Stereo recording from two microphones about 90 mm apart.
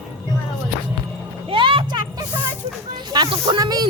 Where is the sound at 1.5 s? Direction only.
75° right (ahead or behind).